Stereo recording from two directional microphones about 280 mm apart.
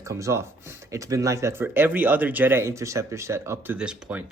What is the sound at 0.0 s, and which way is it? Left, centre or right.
Speech, centre.